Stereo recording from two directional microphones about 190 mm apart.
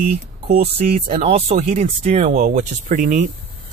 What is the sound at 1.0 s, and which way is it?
Speech, 35° right (ahead or behind).